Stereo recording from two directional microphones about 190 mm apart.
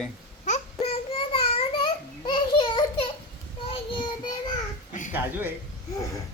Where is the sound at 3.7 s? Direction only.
25° left (ahead or behind).